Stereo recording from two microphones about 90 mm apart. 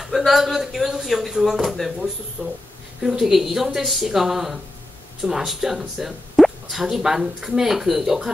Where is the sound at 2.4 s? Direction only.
20° left (ahead or behind).